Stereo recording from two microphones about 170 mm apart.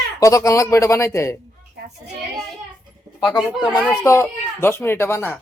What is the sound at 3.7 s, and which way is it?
Speech, 20° left (ahead or behind).